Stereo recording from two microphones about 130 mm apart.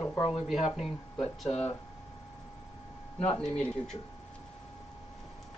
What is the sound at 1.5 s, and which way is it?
Speech, 50° left (ahead or behind).